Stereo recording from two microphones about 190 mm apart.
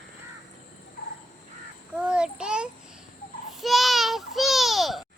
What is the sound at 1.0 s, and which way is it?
Cricket, 50° left (ahead or behind).